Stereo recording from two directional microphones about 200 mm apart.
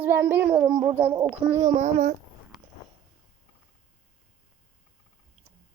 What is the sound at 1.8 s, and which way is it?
Speech, 35° right (ahead or behind).